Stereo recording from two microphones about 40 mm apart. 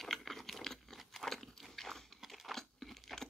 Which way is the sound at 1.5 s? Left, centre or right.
Centre.